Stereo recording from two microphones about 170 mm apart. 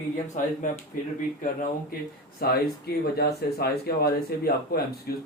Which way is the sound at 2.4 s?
65° left (ahead or behind).